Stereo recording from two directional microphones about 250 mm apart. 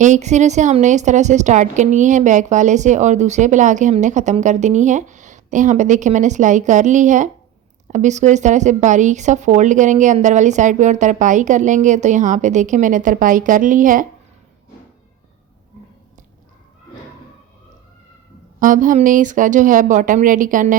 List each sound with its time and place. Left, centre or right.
0.0 s a woman's voice: right
18.6 s speech: right